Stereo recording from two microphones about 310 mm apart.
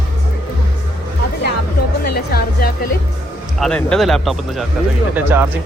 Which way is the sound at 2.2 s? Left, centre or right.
Left.